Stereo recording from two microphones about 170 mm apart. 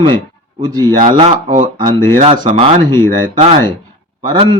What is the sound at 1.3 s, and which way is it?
Speech, 50° right (ahead or behind).